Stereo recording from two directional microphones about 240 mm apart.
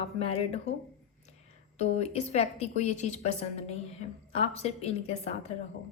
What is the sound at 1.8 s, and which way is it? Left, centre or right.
A woman's voice, left.